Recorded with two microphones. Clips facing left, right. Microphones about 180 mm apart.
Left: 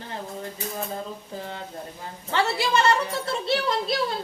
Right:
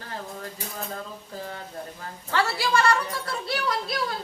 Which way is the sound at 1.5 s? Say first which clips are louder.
Left 1 dB; 20° left (ahead or behind).